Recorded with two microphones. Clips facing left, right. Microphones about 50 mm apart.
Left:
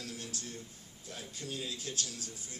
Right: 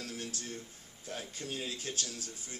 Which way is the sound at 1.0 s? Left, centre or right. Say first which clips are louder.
Right 3 dB; right.